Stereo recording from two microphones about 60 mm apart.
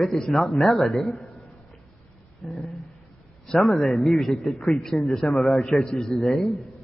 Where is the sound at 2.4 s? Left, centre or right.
Left.